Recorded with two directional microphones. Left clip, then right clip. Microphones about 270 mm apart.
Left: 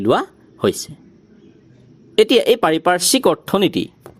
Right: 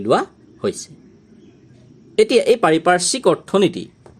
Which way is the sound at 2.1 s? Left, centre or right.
Left.